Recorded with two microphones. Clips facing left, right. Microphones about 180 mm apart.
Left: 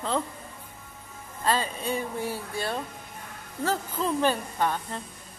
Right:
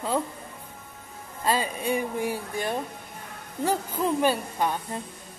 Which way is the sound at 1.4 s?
10° right (ahead or behind).